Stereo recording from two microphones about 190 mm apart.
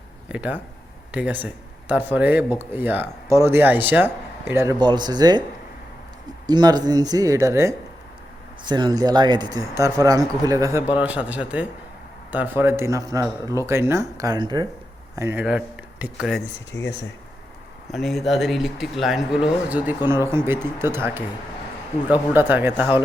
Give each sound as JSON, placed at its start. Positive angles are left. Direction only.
{"t": 0.3, "sound": "a man's voice", "side_deg": -5}
{"t": 6.5, "sound": "speech", "side_deg": -20}
{"t": 16.7, "sound": "speech", "side_deg": 70}
{"t": 17.9, "sound": "a man's voice", "side_deg": 0}